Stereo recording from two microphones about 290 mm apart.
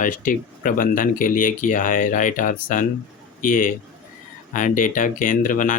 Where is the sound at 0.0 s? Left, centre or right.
Left.